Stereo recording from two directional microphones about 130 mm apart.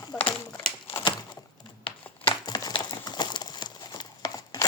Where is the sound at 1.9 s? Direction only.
35° left (ahead or behind).